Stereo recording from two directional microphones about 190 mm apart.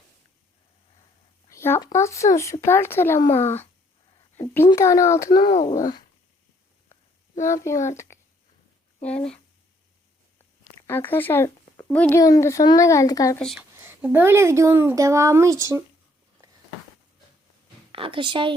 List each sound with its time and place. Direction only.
1.5 s speech: 15° left (ahead or behind)
7.4 s speech: 15° left (ahead or behind)
10.8 s speech: 10° left (ahead or behind)
13.4 s speech: centre (ahead or behind)
13.8 s speech: 10° right (ahead or behind)
17.9 s a woman's voice: 30° right (ahead or behind)